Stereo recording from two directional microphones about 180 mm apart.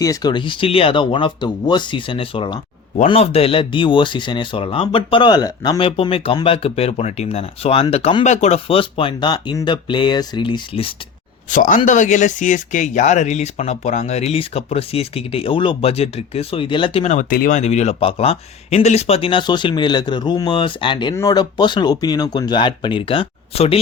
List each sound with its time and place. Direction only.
0.0 s speech: 20° left (ahead or behind)
11.5 s speech: 45° left (ahead or behind)
17.2 s speech: 55° left (ahead or behind)
17.6 s speech: 40° left (ahead or behind)